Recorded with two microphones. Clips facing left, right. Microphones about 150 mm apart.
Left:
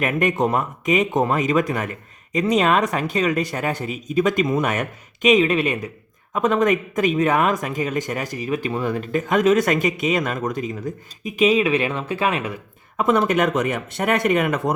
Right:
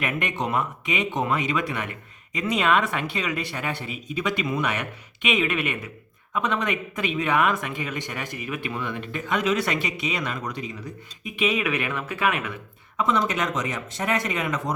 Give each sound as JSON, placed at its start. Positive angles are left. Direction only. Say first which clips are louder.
{"t": 0.0, "sound": "speech", "louder": "left 8 dB", "side_deg": 45}
{"t": 13.0, "sound": "speech", "louder": "left 6 dB", "side_deg": 55}